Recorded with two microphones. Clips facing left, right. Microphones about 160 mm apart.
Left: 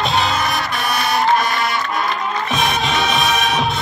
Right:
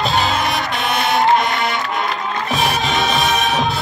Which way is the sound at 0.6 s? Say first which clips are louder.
Right 1 dB; 20° right (ahead or behind).